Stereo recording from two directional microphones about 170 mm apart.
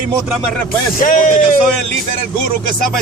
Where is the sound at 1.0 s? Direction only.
50° left (ahead or behind).